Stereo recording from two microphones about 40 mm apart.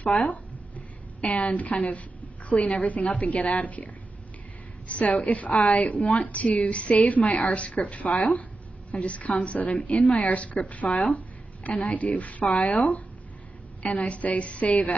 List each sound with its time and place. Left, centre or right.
1.2 s a woman's voice: left
8.1 s speech: centre
8.9 s a woman's voice: left
14.0 s a woman's voice: left